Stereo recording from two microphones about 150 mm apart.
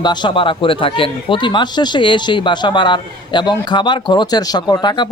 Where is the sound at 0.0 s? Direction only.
30° left (ahead or behind).